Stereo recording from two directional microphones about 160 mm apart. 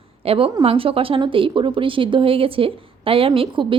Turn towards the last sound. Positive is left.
turn(degrees=-30)  # may be behind; listen again after turning